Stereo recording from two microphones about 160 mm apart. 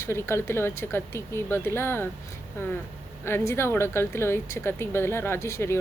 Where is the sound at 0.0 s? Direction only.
15° left (ahead or behind).